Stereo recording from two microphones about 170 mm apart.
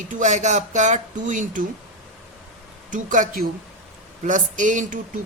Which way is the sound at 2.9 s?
50° right (ahead or behind).